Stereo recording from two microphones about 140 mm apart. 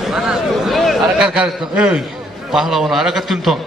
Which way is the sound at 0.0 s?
5° right (ahead or behind).